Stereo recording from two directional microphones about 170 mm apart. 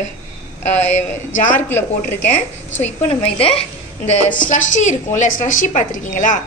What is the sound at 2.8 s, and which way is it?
A woman's voice, 40° left (ahead or behind).